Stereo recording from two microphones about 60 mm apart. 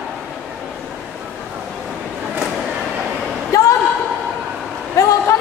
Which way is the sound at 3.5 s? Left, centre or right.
Left.